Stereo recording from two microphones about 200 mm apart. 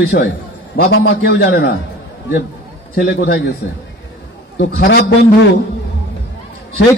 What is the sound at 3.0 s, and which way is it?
Speech, 50° left (ahead or behind).